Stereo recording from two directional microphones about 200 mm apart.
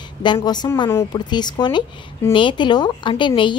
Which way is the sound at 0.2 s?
20° left (ahead or behind).